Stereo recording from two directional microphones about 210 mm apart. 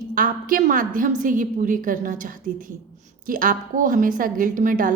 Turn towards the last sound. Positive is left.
turn(degrees=-40)  # may be behind; listen again after turning